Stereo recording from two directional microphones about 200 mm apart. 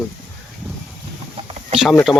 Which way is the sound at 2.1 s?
5° right (ahead or behind).